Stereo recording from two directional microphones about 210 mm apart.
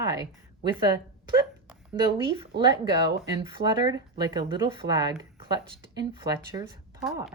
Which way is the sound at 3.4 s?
20° right (ahead or behind).